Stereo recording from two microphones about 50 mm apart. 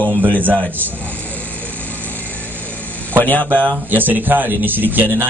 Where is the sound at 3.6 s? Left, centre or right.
Right.